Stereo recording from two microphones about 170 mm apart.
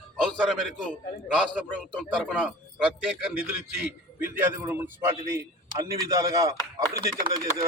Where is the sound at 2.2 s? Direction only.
Centre (ahead or behind).